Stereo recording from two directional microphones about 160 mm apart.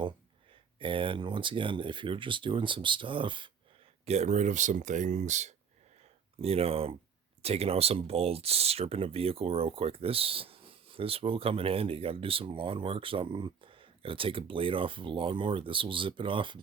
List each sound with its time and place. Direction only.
0.8 s speech: 30° right (ahead or behind)
4.0 s speech: 45° right (ahead or behind)